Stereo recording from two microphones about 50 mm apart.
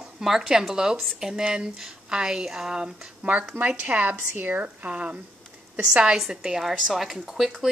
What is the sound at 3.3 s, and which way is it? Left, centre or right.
A woman's voice, right.